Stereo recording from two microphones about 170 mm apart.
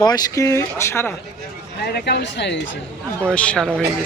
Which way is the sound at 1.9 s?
80° left.